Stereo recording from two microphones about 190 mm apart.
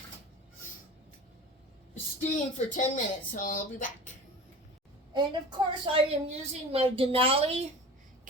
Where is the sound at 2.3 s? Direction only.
40° left (ahead or behind).